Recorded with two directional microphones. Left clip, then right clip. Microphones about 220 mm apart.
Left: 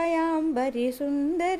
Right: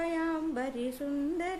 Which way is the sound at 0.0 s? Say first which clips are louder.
Left 7 dB; 35° left (ahead or behind).